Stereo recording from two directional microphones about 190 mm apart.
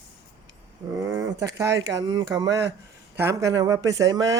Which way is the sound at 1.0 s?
15° right (ahead or behind).